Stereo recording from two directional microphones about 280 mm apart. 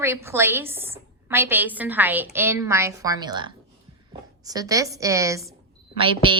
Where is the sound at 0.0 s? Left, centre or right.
Centre.